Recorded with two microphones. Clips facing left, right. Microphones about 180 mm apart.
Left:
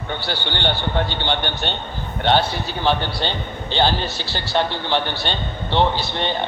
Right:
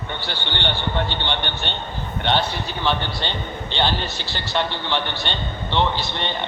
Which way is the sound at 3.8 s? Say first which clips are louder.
Left 3 dB; 35° left (ahead or behind).